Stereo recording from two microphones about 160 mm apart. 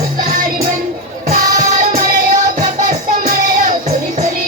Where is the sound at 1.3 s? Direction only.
55° right (ahead or behind).